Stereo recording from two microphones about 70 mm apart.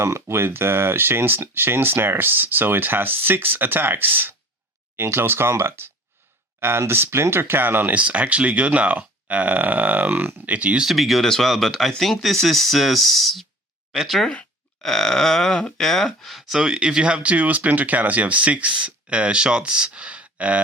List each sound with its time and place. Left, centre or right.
0.0 s speech: right; by 10.8 s centre
10.8 s speech: centre
14.3 s speech: centre